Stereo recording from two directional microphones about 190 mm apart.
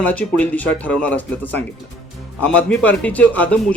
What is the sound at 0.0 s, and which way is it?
A man's voice, 5° left (ahead or behind).